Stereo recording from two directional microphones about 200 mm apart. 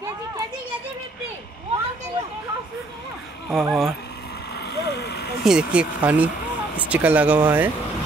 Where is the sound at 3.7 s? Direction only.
Centre (ahead or behind).